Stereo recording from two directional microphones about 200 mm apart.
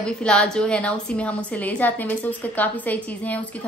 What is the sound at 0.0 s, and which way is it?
A woman's voice, 5° left (ahead or behind).